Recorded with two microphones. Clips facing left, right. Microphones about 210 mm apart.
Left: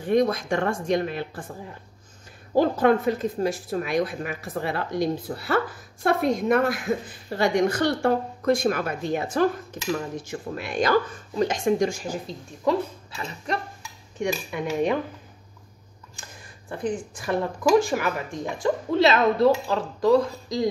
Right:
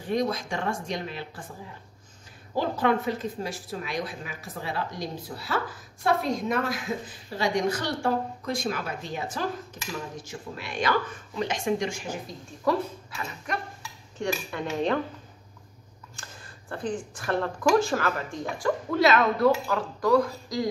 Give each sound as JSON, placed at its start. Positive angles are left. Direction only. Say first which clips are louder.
{"t": 0.0, "sound": "speech", "louder": "left 6 dB", "side_deg": 55}
{"t": 2.5, "sound": "speech", "louder": "left 6 dB", "side_deg": 50}
{"t": 14.2, "sound": "speech", "louder": "left 3 dB", "side_deg": 15}
{"t": 16.2, "sound": "speech", "louder": "left 1 dB", "side_deg": 15}